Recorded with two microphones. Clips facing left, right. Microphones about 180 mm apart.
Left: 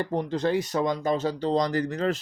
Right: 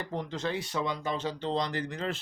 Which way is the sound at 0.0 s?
60° left (ahead or behind).